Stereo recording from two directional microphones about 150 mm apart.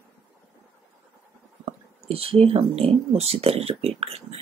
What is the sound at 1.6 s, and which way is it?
Speech, 40° right (ahead or behind).